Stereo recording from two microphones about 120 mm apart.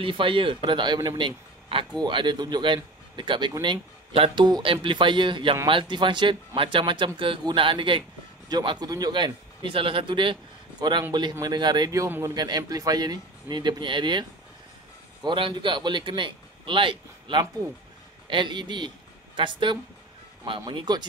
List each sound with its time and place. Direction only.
0.0 s a man's voice: 45° right (ahead or behind)
4.1 s a man's voice: 55° right (ahead or behind)
4.5 s a man's voice: 35° right (ahead or behind)
15.2 s a man's voice: 45° right (ahead or behind)